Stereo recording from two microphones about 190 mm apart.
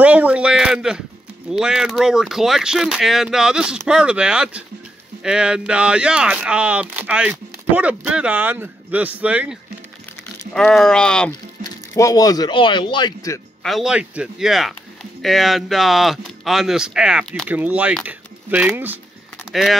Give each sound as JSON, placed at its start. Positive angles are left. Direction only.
{"t": 0.0, "sound": "speech", "side_deg": -5}
{"t": 11.9, "sound": "speech", "side_deg": 15}
{"t": 13.6, "sound": "speech", "side_deg": 0}